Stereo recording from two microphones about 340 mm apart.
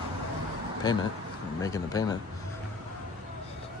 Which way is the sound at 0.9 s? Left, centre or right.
Centre.